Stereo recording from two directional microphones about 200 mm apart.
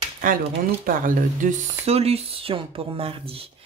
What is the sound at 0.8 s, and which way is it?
Speech, 40° right (ahead or behind).